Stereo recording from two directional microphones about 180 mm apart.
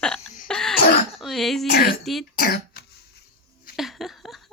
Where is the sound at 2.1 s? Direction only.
Centre (ahead or behind).